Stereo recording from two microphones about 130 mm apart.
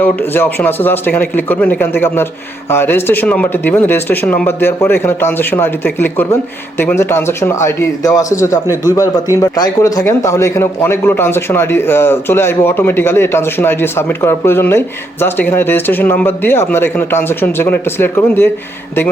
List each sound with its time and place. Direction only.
0.0 s a man's voice: 15° left (ahead or behind)